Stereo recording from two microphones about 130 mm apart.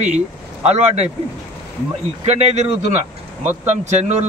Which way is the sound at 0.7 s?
55° right (ahead or behind).